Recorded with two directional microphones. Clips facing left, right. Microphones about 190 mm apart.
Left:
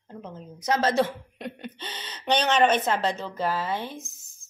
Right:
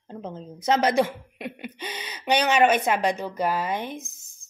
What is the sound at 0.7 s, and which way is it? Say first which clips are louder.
A woman's voice: right 1 dB; 15° right (ahead or behind).